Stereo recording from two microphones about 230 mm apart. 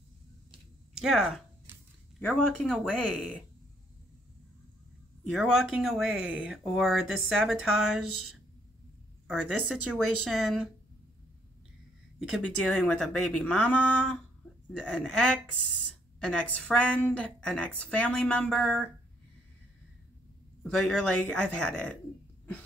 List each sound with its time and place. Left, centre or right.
0.9 s speech: centre
5.3 s speech: centre
8.0 s speech: left
9.8 s speech: centre
12.2 s speech: centre
20.6 s speech: centre